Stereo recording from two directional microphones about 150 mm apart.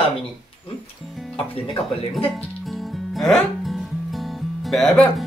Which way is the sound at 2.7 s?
Centre (ahead or behind).